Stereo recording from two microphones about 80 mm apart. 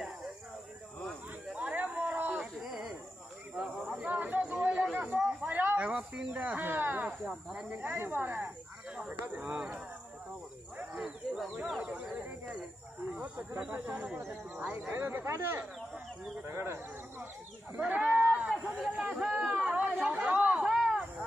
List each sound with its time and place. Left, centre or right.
1.5 s a sound: centre
2.6 s a sound: centre
3.5 s snake: centre
4.0 s chatter: right
4.9 s snake: centre
7.7 s speech: right
8.9 s speech: centre
10.8 s a sound: centre
13.6 s speech: centre; by 17.3 s right
17.7 s sheep: centre
18.8 s a sound: centre
19.6 s chatter: centre